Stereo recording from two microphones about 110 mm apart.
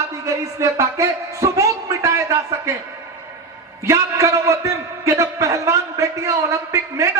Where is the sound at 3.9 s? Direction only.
25° right (ahead or behind).